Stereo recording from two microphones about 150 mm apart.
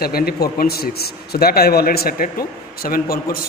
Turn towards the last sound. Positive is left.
turn(degrees=80)